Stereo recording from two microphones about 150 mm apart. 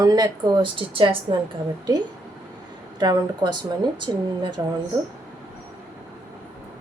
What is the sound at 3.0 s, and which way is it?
A woman's voice, 30° right (ahead or behind).